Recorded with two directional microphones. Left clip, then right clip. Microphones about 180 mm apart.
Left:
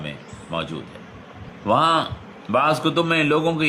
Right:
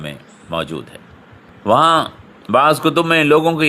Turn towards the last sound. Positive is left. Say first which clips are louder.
# right 7 dB
turn(degrees=-55)  # may be behind; listen again after turning